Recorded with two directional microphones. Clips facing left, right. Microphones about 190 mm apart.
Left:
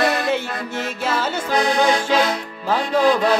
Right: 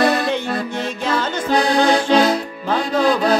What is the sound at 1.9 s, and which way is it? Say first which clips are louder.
Music: right 4 dB; 35° right (ahead or behind).